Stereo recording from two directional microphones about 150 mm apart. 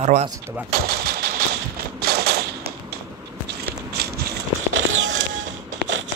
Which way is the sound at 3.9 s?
90° right.